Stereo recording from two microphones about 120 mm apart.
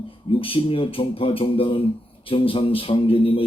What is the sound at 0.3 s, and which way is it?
Speech, 50° left (ahead or behind).